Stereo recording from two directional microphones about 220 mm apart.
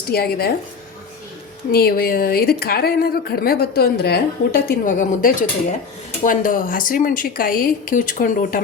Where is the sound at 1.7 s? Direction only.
45° left (ahead or behind).